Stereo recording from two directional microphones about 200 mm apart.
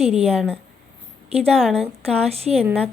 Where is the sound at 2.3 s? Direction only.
30° right (ahead or behind).